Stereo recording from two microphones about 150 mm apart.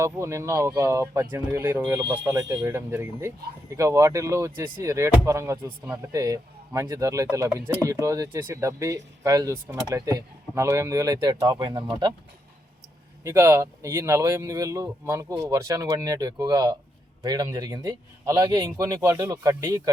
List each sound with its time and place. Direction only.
0.0 s speech: 20° right (ahead or behind)
13.2 s speech: 20° right (ahead or behind)